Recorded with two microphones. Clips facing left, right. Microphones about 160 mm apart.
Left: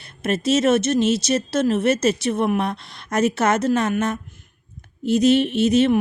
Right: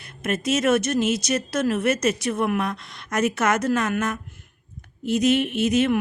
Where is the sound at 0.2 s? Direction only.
30° left (ahead or behind).